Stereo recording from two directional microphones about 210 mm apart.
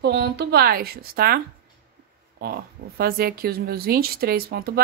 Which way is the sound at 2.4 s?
45° right (ahead or behind).